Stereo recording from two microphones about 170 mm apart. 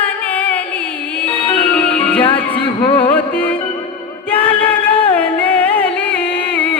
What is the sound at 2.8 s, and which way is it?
Music, 30° left (ahead or behind).